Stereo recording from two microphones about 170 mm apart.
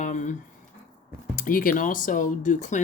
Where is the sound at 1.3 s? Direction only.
55° left (ahead or behind).